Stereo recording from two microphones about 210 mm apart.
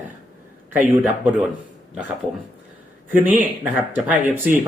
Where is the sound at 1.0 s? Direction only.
5° right (ahead or behind).